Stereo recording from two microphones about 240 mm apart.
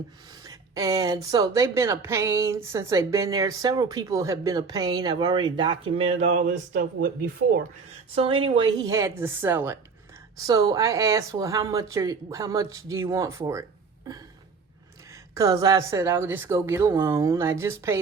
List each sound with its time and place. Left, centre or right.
0.4 s a woman's voice: centre
6.7 s speech: right
8.1 s a woman's voice: right
15.4 s a woman's voice: centre